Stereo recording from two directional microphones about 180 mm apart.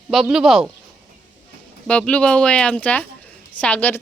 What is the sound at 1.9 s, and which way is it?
A woman's voice, 5° left (ahead or behind).